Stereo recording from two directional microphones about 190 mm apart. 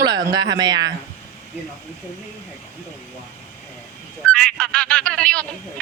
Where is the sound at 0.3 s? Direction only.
20° right (ahead or behind).